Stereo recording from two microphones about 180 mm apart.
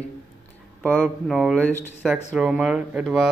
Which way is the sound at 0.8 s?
5° left (ahead or behind).